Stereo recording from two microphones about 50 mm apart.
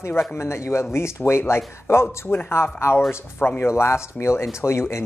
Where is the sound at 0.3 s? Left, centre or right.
Left.